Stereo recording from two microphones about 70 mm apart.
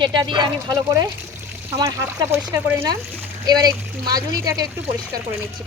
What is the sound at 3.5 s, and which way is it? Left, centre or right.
Speech, right.